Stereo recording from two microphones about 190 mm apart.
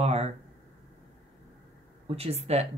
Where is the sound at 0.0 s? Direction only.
35° right (ahead or behind).